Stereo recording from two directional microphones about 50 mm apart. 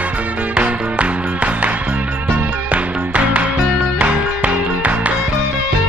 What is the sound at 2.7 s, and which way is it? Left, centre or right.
Music, right.